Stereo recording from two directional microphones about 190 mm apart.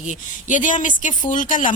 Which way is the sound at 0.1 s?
40° left (ahead or behind).